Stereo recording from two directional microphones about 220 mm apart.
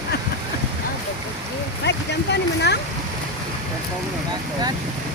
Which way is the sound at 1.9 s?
50° left (ahead or behind).